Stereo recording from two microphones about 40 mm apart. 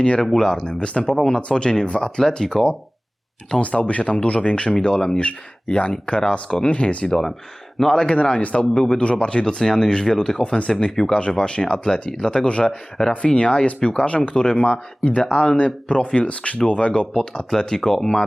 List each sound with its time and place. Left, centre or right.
0.0 s speech: left
3.6 s speech: left
6.7 s speech: left
7.0 s speech: centre
7.9 s speech: left
8.7 s speech: centre
13.0 s speech: centre
13.3 s speech: left; by 18.3 s centre